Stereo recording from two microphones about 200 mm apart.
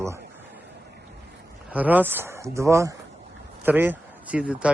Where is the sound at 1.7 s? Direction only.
10° right (ahead or behind).